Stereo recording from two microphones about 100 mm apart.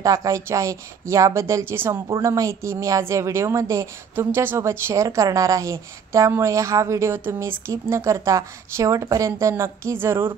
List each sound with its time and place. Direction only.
0.0 s a woman's voice: 35° right (ahead or behind)
2.0 s a woman's voice: 35° right (ahead or behind)